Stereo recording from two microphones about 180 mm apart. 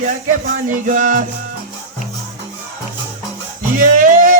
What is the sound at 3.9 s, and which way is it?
Music, 50° right (ahead or behind).